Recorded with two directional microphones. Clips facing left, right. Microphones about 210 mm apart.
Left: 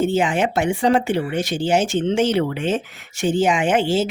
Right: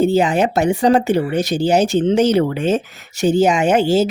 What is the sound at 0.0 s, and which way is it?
Speech, 35° right (ahead or behind).